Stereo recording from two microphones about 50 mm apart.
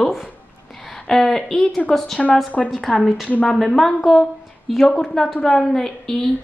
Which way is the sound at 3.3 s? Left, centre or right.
Left.